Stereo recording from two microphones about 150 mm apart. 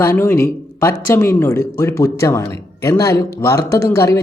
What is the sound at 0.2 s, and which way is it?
Speech, 15° left (ahead or behind).